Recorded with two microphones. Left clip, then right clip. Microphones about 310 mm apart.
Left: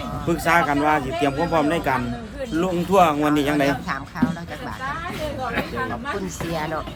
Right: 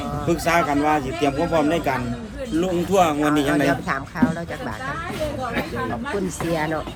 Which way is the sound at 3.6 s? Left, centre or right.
Centre.